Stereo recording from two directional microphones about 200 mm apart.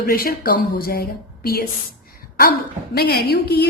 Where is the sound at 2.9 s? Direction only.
50° left (ahead or behind).